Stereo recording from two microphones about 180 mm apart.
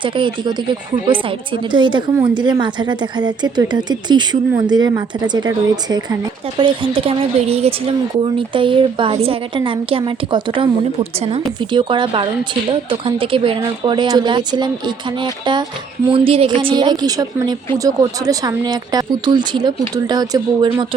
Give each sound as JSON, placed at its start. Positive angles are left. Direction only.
{"t": 0.0, "sound": "speech", "side_deg": -25}
{"t": 8.5, "sound": "speech", "side_deg": -30}
{"t": 11.7, "sound": "speech", "side_deg": -25}